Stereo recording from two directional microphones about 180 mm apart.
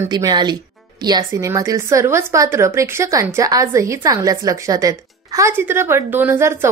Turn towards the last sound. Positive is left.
turn(degrees=-15)  # may be behind; listen again after turning